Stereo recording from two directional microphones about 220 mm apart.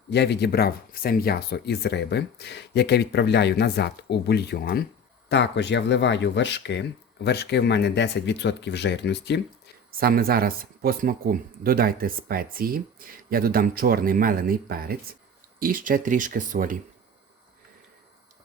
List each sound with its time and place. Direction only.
0.1 s speech: 50° left (ahead or behind)
10.0 s speech: 40° right (ahead or behind)